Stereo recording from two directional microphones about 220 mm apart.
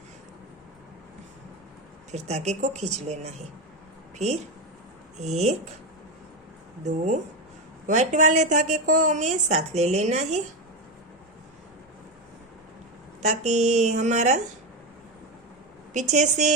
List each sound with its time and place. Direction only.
2.1 s a woman's voice: 30° right (ahead or behind)
5.1 s a woman's voice: 30° right (ahead or behind)
6.8 s a woman's voice: 30° right (ahead or behind)
13.2 s a woman's voice: 30° right (ahead or behind)
15.9 s a woman's voice: 35° right (ahead or behind)